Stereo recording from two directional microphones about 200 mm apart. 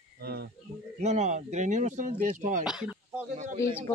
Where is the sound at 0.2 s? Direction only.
50° right (ahead or behind).